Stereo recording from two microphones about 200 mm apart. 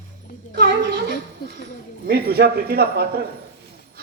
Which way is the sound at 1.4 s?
50° left (ahead or behind).